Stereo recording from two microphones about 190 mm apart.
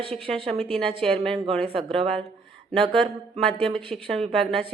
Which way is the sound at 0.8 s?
30° right (ahead or behind).